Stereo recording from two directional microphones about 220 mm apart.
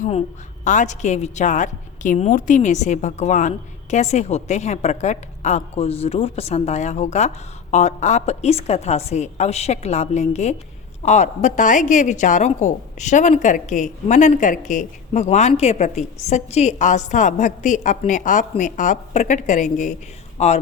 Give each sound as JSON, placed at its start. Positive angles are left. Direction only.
{"t": 0.0, "sound": "a woman's voice", "side_deg": 30}